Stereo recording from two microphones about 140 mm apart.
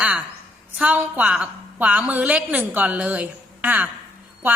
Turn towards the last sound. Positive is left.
turn(degrees=-15)  # may be behind; listen again after turning